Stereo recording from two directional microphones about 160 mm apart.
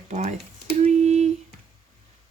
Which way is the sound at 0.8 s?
45° right (ahead or behind).